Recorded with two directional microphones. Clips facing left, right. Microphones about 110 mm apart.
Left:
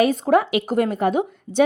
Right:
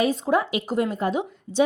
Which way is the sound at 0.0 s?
60° left (ahead or behind).